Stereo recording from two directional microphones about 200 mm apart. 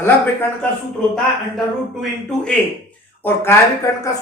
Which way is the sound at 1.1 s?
Centre (ahead or behind).